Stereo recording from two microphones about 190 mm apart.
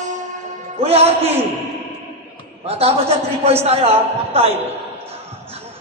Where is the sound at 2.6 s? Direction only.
30° right (ahead or behind).